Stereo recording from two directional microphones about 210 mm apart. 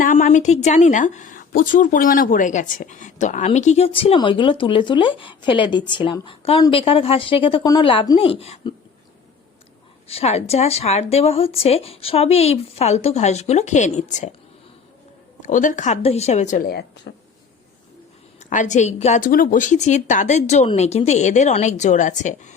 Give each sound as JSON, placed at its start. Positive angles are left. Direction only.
{"t": 0.0, "sound": "a woman's voice", "side_deg": 35}
{"t": 10.1, "sound": "a woman's voice", "side_deg": 30}
{"t": 15.4, "sound": "speech", "side_deg": 35}
{"t": 18.3, "sound": "speech", "side_deg": 35}